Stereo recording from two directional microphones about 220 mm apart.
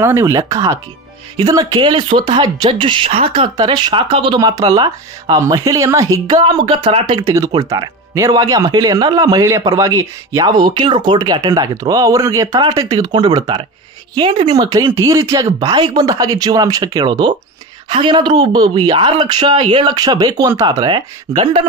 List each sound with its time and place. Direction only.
0.0 s speech: 15° right (ahead or behind)